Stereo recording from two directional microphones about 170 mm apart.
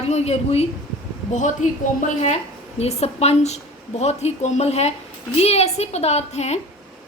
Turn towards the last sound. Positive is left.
turn(degrees=40)  # may be behind; listen again after turning